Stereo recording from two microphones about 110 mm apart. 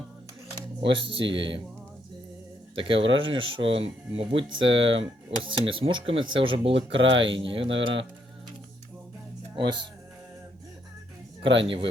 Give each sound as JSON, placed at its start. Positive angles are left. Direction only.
{"t": 0.8, "sound": "speech", "side_deg": -50}
{"t": 2.7, "sound": "speech", "side_deg": -55}
{"t": 11.4, "sound": "speech", "side_deg": -50}